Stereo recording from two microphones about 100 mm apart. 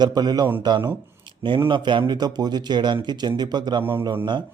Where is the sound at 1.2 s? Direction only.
55° right (ahead or behind).